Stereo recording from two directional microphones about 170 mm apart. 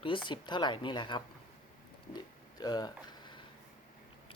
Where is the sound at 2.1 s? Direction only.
25° left (ahead or behind).